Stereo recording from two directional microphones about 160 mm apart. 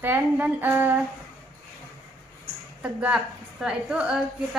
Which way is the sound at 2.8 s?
5° right (ahead or behind).